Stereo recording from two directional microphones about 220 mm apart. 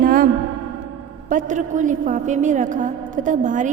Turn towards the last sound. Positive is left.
turn(degrees=-35)  # may be behind; listen again after turning